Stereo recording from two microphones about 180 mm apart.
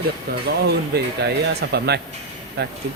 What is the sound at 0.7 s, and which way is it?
Speech, 65° right (ahead or behind).